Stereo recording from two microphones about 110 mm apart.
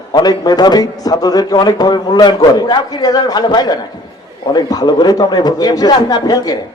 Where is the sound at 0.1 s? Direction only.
35° left (ahead or behind).